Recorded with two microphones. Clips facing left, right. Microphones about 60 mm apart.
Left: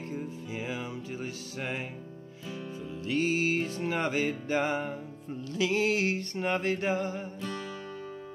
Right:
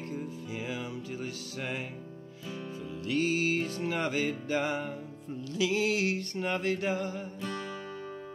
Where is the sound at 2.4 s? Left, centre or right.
Centre.